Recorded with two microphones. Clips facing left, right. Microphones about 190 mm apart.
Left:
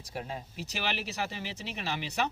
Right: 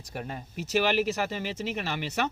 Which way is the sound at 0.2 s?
55° right (ahead or behind).